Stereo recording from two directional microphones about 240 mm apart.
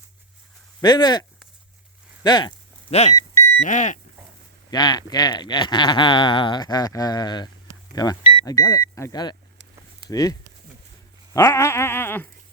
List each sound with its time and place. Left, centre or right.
0.8 s speech: centre
3.6 s goat: left
4.7 s speech: centre
11.3 s speech: centre